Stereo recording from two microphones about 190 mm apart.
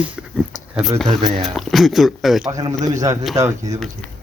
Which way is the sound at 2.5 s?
25° right (ahead or behind).